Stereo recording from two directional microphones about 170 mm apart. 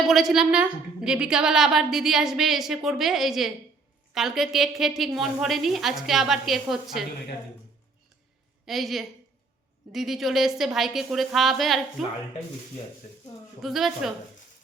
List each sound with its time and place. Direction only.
0.1 s a woman's voice: centre (ahead or behind)
8.6 s a woman's voice: centre (ahead or behind)
13.0 s speech: 45° left (ahead or behind)
13.6 s a woman's voice: centre (ahead or behind)